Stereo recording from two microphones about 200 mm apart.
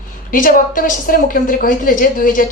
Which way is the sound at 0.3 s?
40° left (ahead or behind).